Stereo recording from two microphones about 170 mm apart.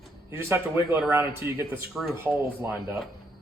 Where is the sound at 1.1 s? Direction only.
15° right (ahead or behind).